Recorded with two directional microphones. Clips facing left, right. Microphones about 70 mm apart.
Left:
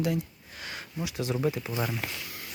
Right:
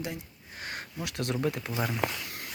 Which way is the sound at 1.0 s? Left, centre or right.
Right.